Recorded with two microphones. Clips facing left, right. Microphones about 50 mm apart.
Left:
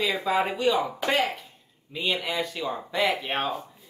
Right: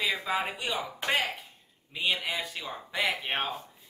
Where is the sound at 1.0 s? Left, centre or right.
Centre.